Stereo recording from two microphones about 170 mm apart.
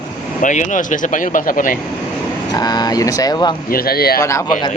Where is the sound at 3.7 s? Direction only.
60° left (ahead or behind).